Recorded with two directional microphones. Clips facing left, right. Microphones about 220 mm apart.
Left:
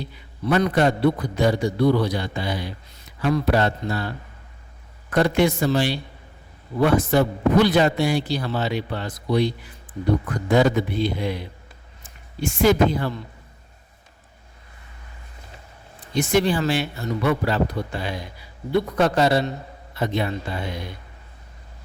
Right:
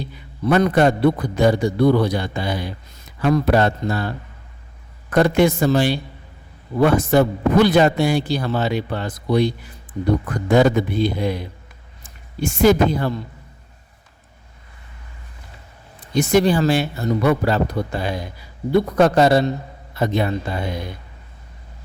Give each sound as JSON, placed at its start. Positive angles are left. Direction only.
{"t": 0.4, "sound": "speech", "side_deg": -50}
{"t": 5.1, "sound": "speech", "side_deg": -45}
{"t": 10.5, "sound": "speech", "side_deg": -50}
{"t": 16.1, "sound": "speech", "side_deg": -40}